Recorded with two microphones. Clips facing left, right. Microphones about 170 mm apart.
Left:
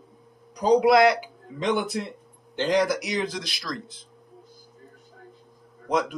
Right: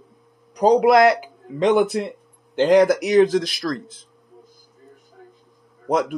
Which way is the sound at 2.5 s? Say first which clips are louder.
Right 8 dB; 60° right (ahead or behind).